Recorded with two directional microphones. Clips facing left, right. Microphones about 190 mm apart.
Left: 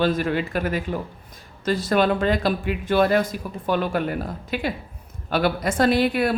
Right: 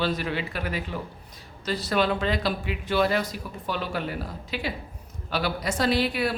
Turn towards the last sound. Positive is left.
turn(degrees=50)  # may be behind; listen again after turning